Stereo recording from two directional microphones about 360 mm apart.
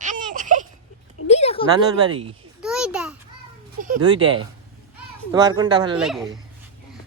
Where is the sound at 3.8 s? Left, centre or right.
Right.